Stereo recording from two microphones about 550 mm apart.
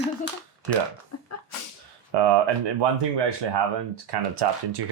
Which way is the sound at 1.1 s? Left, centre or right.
Left.